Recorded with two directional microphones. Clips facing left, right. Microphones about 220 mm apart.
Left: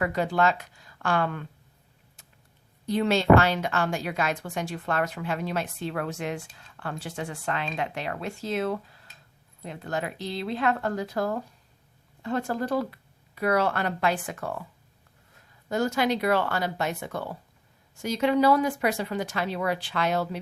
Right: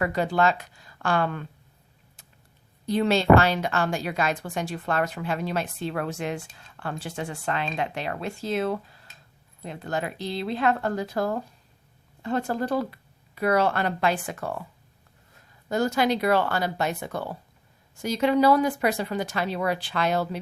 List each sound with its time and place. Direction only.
0.0 s a woman's voice: 35° right (ahead or behind)
2.8 s a woman's voice: 35° right (ahead or behind)
15.7 s a woman's voice: 35° right (ahead or behind)